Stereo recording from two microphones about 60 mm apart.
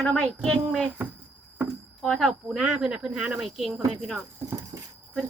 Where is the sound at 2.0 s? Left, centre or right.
Centre.